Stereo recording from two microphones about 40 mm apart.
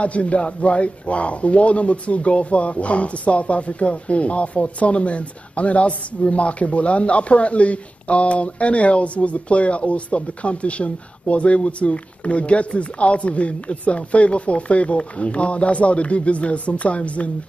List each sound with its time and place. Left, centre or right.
0.0 s a man's voice: left